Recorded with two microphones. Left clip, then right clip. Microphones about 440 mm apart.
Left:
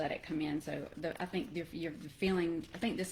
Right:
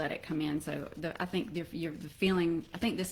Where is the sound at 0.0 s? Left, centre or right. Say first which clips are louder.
Right 2 dB; right.